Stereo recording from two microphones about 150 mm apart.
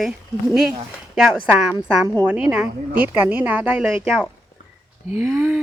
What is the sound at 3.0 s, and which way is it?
Speech, 10° right (ahead or behind).